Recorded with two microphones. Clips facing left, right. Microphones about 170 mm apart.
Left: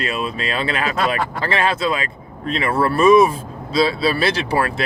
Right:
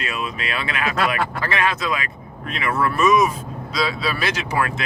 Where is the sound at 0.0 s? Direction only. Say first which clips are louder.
Left 4 dB; 30° left (ahead or behind).